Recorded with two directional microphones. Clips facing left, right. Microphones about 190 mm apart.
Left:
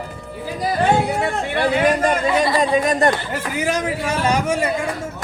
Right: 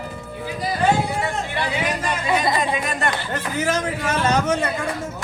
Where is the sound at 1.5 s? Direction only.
50° left (ahead or behind).